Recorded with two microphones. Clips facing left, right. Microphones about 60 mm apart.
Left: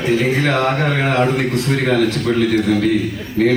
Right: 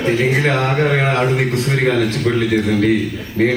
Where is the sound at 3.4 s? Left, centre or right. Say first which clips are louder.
Left 1 dB; right.